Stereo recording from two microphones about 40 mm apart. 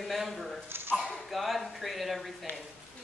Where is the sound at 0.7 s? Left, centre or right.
Right.